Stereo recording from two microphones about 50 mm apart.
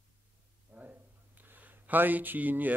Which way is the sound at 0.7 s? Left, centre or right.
Right.